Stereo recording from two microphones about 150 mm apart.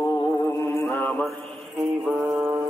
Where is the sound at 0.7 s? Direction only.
15° left (ahead or behind).